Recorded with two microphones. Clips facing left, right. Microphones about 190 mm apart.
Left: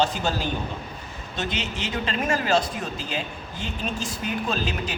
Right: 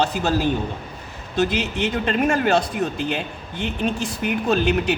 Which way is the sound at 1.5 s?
60° right (ahead or behind).